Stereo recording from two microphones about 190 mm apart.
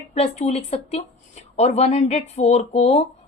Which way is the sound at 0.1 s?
35° left (ahead or behind).